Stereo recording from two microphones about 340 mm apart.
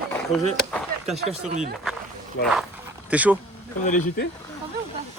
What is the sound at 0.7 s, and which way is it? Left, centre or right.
Speech, centre.